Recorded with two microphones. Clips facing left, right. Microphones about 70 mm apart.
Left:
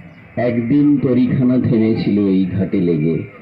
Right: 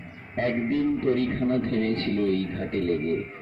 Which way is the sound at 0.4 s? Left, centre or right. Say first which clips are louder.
Left 11 dB; left.